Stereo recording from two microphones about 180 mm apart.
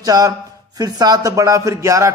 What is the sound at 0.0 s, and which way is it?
A man's voice, 20° right (ahead or behind).